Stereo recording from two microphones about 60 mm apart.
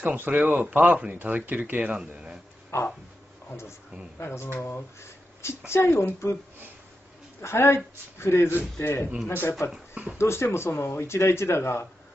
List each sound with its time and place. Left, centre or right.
0.0 s speech: right
2.7 s a sound: left
4.2 s speech: left
5.7 s speech: left
7.4 s speech: left